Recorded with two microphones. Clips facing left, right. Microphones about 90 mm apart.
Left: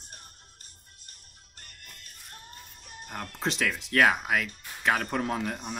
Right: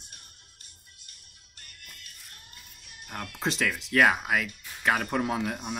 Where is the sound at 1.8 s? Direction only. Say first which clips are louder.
Even; 40° left (ahead or behind).